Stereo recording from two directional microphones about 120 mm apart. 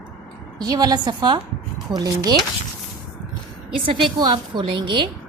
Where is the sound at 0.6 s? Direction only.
35° right (ahead or behind).